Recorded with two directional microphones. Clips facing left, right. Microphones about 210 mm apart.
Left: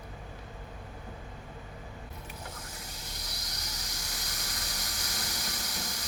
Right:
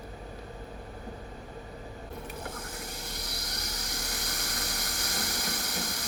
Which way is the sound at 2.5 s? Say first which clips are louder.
Right 6 dB; 55° right (ahead or behind).